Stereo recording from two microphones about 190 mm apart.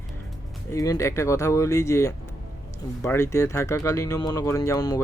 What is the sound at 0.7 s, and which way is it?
Speech, 15° left (ahead or behind).